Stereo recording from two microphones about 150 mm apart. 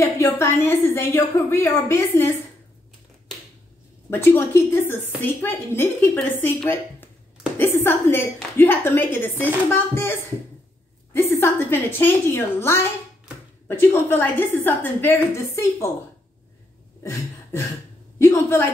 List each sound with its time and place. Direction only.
0.0 s a woman's voice: 20° left (ahead or behind)
4.1 s speech: 15° left (ahead or behind)
11.1 s speech: 15° left (ahead or behind)
17.0 s a sound: 20° left (ahead or behind)
18.2 s a woman's voice: 20° left (ahead or behind)